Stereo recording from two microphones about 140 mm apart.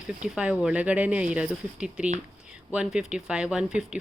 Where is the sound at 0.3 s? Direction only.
5° right (ahead or behind).